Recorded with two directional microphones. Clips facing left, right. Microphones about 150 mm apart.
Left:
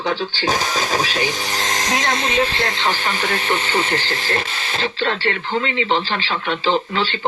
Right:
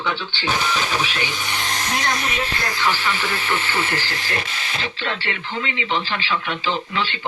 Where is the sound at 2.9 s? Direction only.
45° left (ahead or behind).